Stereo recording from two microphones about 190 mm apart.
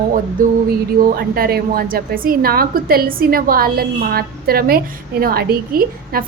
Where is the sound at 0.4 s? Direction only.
45° right (ahead or behind).